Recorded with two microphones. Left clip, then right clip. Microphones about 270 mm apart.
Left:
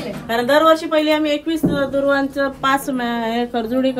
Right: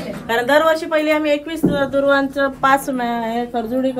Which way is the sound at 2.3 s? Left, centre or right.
Centre.